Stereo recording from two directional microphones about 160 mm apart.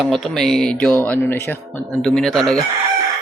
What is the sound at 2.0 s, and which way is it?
Speech, 5° left (ahead or behind).